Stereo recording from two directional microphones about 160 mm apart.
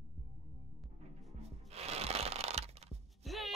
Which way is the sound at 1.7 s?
40° right (ahead or behind).